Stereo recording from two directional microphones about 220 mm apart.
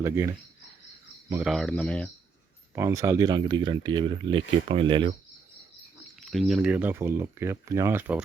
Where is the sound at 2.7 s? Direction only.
15° right (ahead or behind).